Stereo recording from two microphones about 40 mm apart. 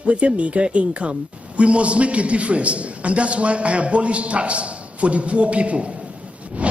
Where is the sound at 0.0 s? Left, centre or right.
Right.